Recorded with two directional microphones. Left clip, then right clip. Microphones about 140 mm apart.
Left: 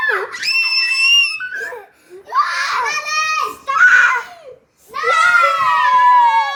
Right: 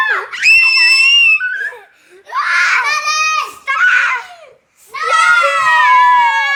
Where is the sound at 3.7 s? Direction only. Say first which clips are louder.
Left 1 dB; 45° left (ahead or behind).